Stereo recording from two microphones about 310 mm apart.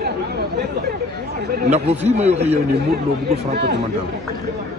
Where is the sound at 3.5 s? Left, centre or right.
Right.